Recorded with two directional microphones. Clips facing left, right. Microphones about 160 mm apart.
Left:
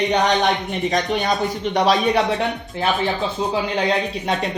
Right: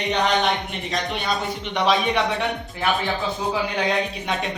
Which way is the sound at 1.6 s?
40° left (ahead or behind).